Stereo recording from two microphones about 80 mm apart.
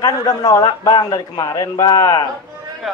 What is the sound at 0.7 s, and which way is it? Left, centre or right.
A man's voice, left.